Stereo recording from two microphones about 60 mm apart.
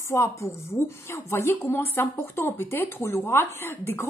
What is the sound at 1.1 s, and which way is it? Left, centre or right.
Speech, left.